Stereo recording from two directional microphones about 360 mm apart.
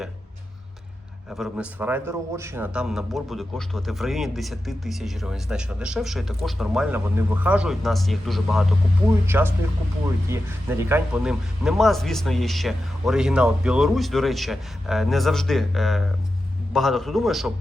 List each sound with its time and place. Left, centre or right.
1.3 s a man's voice: centre